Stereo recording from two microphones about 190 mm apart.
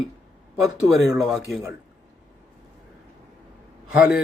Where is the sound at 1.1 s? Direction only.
Centre (ahead or behind).